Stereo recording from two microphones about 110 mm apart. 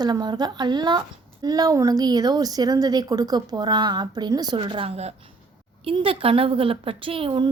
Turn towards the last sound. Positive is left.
turn(degrees=-50)  # may be behind; listen again after turning